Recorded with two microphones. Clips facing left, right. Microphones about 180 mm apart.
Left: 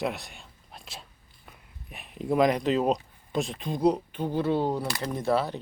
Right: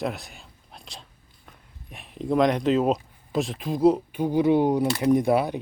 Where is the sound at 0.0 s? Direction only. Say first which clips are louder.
Right 1 dB; centre (ahead or behind).